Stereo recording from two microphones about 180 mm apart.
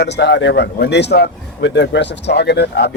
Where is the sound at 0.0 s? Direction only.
70° left (ahead or behind).